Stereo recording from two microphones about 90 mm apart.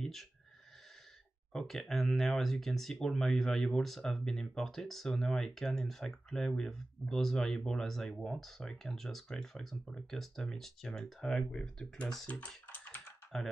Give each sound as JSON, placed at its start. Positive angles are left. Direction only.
{"t": 0.0, "sound": "speech", "side_deg": 5}
{"t": 1.5, "sound": "speech", "side_deg": 5}
{"t": 12.4, "sound": "typing", "side_deg": 20}
{"t": 13.3, "sound": "speech", "side_deg": 5}